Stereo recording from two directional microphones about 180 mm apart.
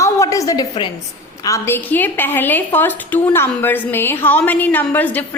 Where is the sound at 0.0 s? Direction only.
15° left (ahead or behind).